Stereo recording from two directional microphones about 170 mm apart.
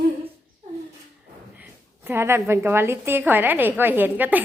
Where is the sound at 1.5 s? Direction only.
10° right (ahead or behind).